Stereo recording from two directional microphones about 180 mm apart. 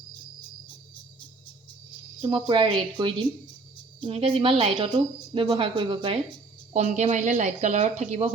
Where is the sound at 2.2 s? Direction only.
30° right (ahead or behind).